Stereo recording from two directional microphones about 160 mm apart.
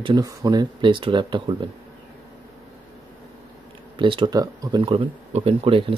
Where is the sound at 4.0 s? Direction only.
30° right (ahead or behind).